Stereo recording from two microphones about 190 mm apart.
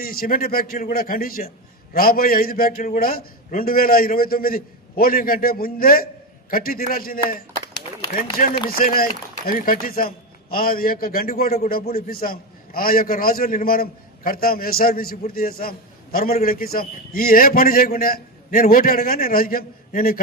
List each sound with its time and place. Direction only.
0.0 s a man's voice: 50° left (ahead or behind)
8.8 s a man's voice: 45° left (ahead or behind)